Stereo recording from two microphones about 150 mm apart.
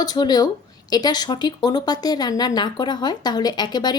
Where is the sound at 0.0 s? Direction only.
25° left (ahead or behind).